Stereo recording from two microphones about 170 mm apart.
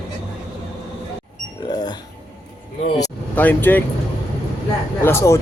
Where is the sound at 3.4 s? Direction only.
10° left (ahead or behind).